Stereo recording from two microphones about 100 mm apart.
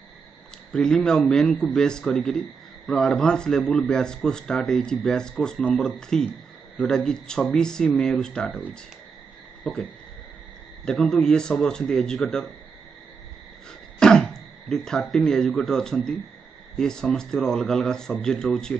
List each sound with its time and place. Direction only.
0.7 s a man's voice: 5° left (ahead or behind)
10.9 s a man's voice: centre (ahead or behind)
13.9 s a man's voice: 10° left (ahead or behind)